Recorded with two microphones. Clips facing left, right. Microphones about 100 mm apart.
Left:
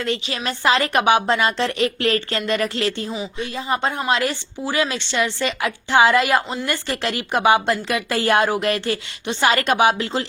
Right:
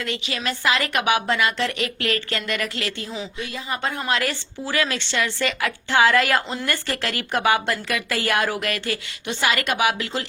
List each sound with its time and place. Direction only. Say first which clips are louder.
0.0 s a woman's voice: left 3 dB; 30° left (ahead or behind)